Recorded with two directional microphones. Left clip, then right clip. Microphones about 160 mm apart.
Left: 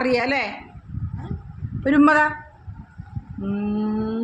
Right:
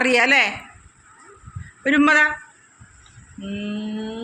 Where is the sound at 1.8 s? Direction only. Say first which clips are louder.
Right 1 dB; 40° left (ahead or behind).